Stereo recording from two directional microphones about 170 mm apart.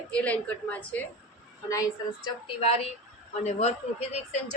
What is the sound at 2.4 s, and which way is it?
Speech, 35° left (ahead or behind).